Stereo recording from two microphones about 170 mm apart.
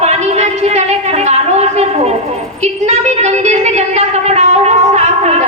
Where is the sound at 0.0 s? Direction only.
40° right (ahead or behind).